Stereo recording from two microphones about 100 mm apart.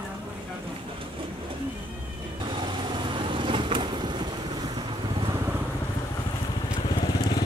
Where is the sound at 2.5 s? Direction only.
55° right (ahead or behind).